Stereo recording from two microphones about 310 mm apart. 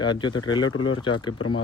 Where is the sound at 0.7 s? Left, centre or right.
Left.